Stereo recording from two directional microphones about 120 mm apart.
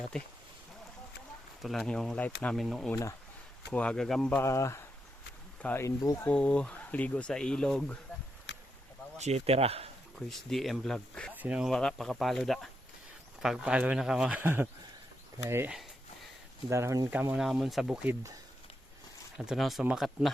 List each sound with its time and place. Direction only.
1.6 s speech: centre (ahead or behind)
4.4 s speech: 25° left (ahead or behind)
6.3 s speech: 10° left (ahead or behind)
9.1 s speech: 65° right (ahead or behind)
10.2 s speech: centre (ahead or behind)
11.3 s speech: 10° right (ahead or behind)
11.7 s speech: 5° left (ahead or behind); by 17.1 s 25° right (ahead or behind)
17.3 s speech: 5° right (ahead or behind)
18.1 s speech: 25° right (ahead or behind)
19.5 s speech: centre (ahead or behind)